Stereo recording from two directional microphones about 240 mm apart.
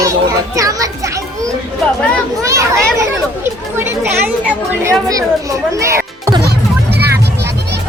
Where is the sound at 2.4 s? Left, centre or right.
Centre.